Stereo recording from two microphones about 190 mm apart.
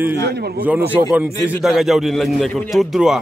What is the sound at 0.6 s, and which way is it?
A man's voice, 10° right (ahead or behind).